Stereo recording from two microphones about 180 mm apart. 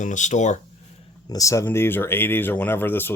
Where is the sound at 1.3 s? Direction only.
20° left (ahead or behind).